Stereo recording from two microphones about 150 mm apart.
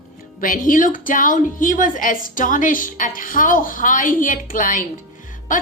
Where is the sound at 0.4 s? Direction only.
65° left (ahead or behind).